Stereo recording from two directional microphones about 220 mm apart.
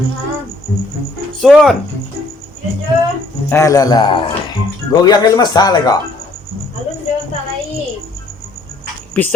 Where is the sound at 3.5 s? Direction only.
15° left (ahead or behind).